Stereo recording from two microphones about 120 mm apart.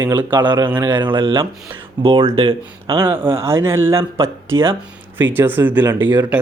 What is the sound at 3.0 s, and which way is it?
Speech, 20° right (ahead or behind).